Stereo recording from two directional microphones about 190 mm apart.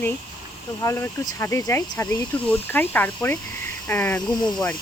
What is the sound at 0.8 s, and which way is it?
Speech, 15° left (ahead or behind).